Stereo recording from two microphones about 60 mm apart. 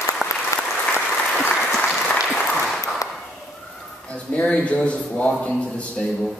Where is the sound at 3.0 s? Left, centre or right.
Left.